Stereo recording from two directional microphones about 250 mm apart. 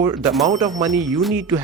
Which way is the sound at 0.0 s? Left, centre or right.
Centre.